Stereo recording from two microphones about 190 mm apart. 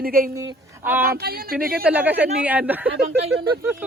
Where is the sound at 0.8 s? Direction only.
10° right (ahead or behind).